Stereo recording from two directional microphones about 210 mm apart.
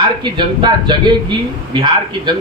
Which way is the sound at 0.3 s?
20° right (ahead or behind).